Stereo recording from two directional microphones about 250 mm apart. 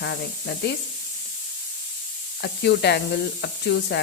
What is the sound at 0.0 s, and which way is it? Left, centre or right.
Speech, left.